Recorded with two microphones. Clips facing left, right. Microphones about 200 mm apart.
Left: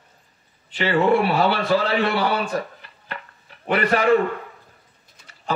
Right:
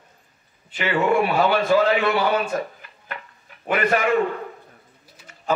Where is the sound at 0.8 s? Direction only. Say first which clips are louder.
Left 2 dB; 35° left (ahead or behind).